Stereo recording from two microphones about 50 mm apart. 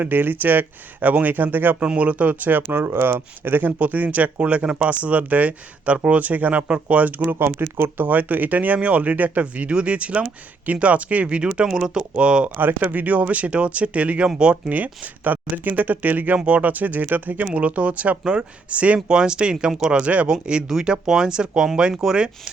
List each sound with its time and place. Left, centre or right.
0.0 s speech: right
1.8 s speech: right
2.8 s speech: right
3.8 s speech: right
7.2 s speech: right
8.0 s speech: right; by 12.5 s centre
12.5 s speech: right; by 14.6 s centre
14.7 s speech: right
18.9 s speech: centre